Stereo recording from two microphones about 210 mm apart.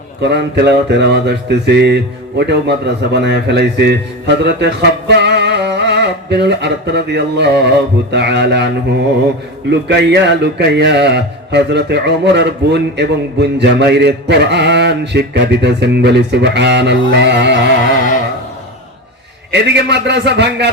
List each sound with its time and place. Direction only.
0.2 s speech: 55° right (ahead or behind)
19.5 s a man's voice: 55° right (ahead or behind)